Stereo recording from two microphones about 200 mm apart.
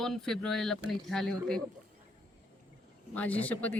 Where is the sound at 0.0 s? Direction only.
Centre (ahead or behind).